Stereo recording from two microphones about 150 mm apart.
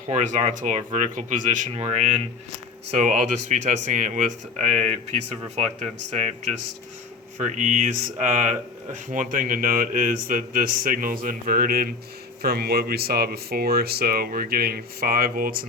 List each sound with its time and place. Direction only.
0.1 s a man's voice: 50° right (ahead or behind); by 11.9 s 80° right
12.4 s speech: 90° right